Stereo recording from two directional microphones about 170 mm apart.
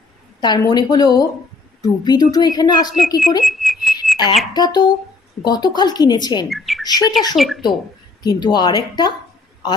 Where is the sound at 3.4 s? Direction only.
Centre (ahead or behind).